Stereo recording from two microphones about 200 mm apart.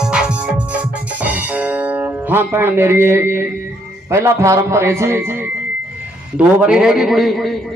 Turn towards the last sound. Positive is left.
turn(degrees=0)  # may be behind; listen again after turning